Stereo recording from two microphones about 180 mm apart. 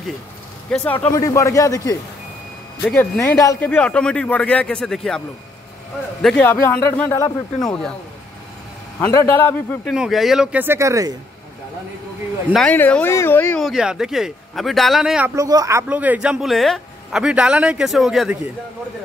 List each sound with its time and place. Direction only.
0.7 s a man's voice: 10° left (ahead or behind)
2.8 s speech: 5° left (ahead or behind)
3.2 s speech: 15° left (ahead or behind)
6.2 s speech: 10° left (ahead or behind)
9.0 s speech: 15° left (ahead or behind)
9.8 s speech: centre (ahead or behind); by 11.1 s 20° right (ahead or behind)
12.5 s speech: 10° left (ahead or behind)
15.3 s speech: 20° right (ahead or behind)
15.9 s speech: 10° right (ahead or behind)